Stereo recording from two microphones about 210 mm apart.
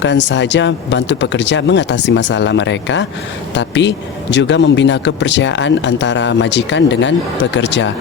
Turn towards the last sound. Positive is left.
turn(degrees=55)  # may be behind; listen again after turning